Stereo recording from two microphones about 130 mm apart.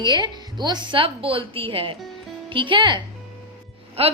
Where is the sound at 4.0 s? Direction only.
50° right (ahead or behind).